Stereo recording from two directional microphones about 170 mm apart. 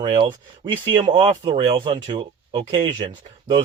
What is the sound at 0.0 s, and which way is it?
Speech, 25° right (ahead or behind).